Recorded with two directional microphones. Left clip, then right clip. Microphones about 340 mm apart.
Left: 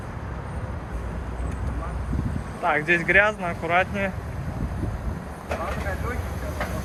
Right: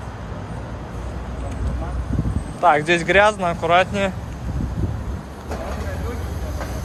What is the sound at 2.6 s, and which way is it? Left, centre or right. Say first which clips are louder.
Speech: right 5 dB; centre.